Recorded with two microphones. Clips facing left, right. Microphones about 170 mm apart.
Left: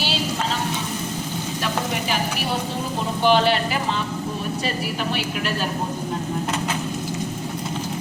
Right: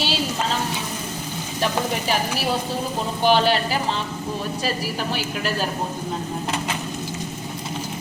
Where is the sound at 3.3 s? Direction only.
40° right (ahead or behind).